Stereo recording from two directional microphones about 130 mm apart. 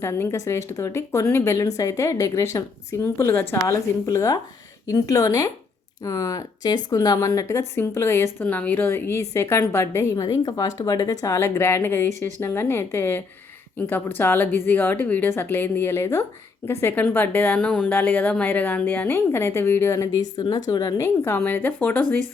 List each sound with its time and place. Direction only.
0.0 s a woman's voice: 20° left (ahead or behind)
20.7 s speech: 35° left (ahead or behind)
21.0 s a woman's voice: 20° left (ahead or behind)